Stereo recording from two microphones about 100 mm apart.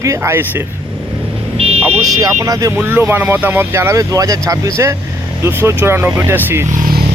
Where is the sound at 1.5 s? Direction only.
90° right.